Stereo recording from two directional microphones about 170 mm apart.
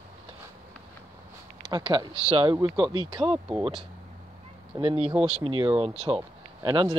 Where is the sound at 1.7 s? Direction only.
25° right (ahead or behind).